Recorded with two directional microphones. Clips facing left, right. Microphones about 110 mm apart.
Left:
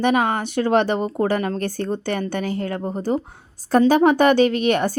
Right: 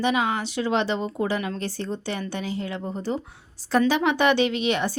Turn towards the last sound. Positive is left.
turn(degrees=50)  # may be behind; listen again after turning